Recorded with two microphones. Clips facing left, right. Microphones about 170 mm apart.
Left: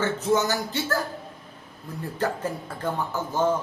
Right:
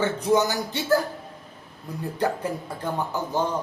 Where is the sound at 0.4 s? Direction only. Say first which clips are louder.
Right 1 dB; 15° right (ahead or behind).